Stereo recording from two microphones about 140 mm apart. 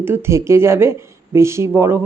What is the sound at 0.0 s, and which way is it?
Speech, 15° right (ahead or behind).